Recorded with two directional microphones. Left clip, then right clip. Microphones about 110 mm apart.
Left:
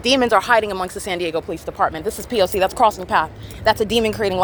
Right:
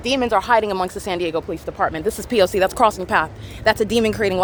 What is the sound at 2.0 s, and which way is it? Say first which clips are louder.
Speech: right 2 dB; 60° right (ahead or behind).